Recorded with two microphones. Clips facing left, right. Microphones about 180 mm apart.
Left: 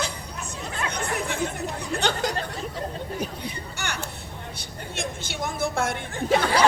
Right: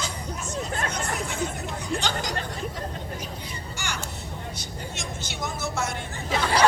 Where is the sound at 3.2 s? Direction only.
60° left (ahead or behind).